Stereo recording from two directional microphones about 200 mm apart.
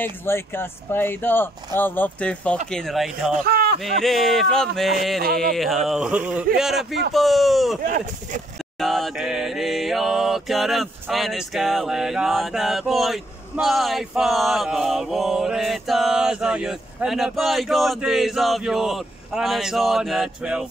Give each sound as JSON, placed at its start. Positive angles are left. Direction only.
{"t": 0.0, "sound": "speech", "side_deg": 10}
{"t": 2.7, "sound": "mantra", "side_deg": 0}
{"t": 3.4, "sound": "a sound", "side_deg": -50}
{"t": 3.8, "sound": "mantra", "side_deg": 0}
{"t": 7.8, "sound": "speech", "side_deg": -45}
{"t": 8.7, "sound": "mantra", "side_deg": 0}